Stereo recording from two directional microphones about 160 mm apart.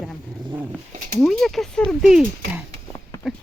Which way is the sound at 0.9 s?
50° right (ahead or behind).